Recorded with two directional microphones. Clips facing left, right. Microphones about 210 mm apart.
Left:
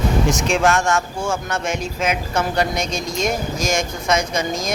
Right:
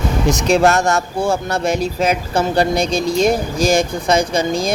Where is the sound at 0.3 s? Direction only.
35° right (ahead or behind).